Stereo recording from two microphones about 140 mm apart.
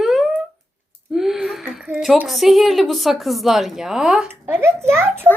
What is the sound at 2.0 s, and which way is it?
A woman's voice, centre (ahead or behind).